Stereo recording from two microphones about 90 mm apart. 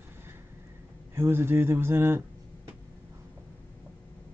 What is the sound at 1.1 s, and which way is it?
Speech, 25° right (ahead or behind).